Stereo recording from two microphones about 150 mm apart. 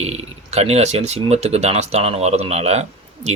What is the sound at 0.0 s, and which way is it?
Speech, 45° right (ahead or behind).